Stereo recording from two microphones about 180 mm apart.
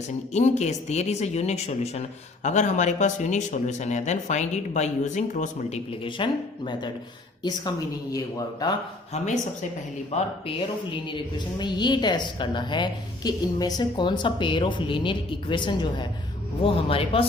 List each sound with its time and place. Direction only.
0.3 s speech: 40° left (ahead or behind)
8.1 s a woman's voice: 20° left (ahead or behind)
9.1 s speech: 40° left (ahead or behind)
11.6 s a woman's voice: 25° left (ahead or behind)